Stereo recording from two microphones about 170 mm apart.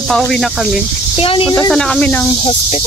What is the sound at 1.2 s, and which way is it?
Speech, 30° left (ahead or behind).